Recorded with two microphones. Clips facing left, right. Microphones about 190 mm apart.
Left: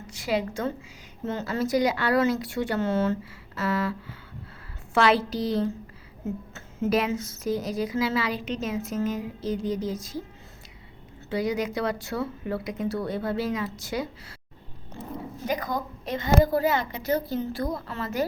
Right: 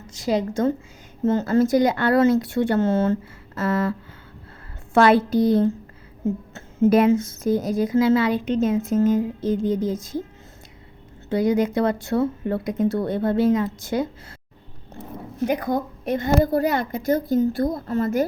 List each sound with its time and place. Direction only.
0.3 s a woman's voice: 45° right (ahead or behind)
4.9 s a woman's voice: 50° right (ahead or behind)
6.9 s a woman's voice: 50° right (ahead or behind)
11.3 s a woman's voice: 50° right (ahead or behind)
15.4 s a woman's voice: 60° right (ahead or behind)